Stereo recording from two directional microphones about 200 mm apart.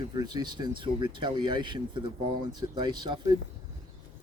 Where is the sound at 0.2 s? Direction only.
20° right (ahead or behind).